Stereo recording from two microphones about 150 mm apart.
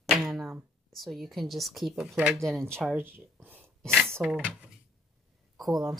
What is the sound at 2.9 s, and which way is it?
Speech, 10° right (ahead or behind).